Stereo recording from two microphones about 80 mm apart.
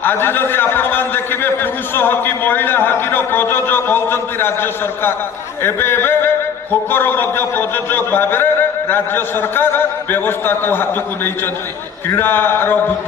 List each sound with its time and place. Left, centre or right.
0.0 s a man's voice: left